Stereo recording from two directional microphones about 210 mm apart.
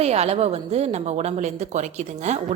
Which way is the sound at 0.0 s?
30° right (ahead or behind).